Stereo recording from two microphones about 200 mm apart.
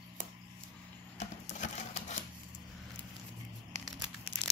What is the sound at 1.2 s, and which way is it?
Sewing machine, 35° left (ahead or behind).